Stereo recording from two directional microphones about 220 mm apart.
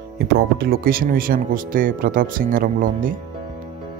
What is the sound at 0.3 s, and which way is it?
Speech, 45° right (ahead or behind).